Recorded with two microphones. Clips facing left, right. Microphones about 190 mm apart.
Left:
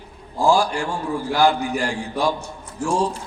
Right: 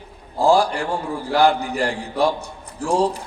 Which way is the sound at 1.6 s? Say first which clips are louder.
Even; 35° right (ahead or behind).